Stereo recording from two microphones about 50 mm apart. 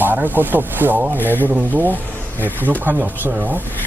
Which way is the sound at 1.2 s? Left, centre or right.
Left.